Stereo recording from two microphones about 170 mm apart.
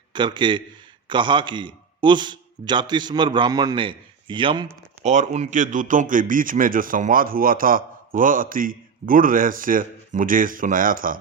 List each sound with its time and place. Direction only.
0.1 s a man's voice: 25° right (ahead or behind)
5.0 s a man's voice: 45° right (ahead or behind)